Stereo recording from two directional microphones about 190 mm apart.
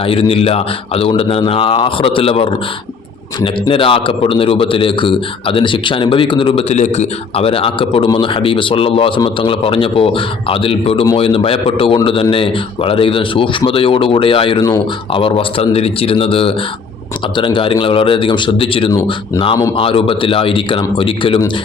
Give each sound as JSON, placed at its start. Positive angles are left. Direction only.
{"t": 0.0, "sound": "a man's voice", "side_deg": 30}